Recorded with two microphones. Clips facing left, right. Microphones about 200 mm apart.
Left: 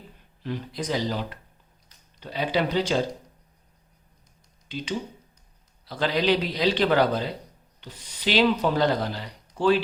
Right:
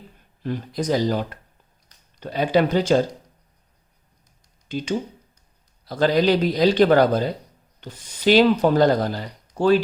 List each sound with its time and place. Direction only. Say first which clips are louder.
0.4 s speech: right 5 dB; 45° right (ahead or behind)
4.7 s speech: right 5 dB; 45° right (ahead or behind)